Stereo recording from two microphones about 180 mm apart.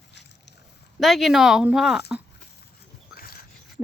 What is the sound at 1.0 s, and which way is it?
Speech, centre (ahead or behind).